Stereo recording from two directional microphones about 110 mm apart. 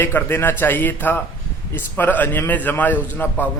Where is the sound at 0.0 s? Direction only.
20° left (ahead or behind).